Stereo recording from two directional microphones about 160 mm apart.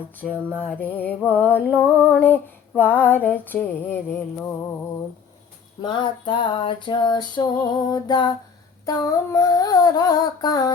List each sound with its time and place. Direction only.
0.2 s music: 5° left (ahead or behind)
0.6 s a sound: 10° left (ahead or behind)
5.8 s music: 30° left (ahead or behind)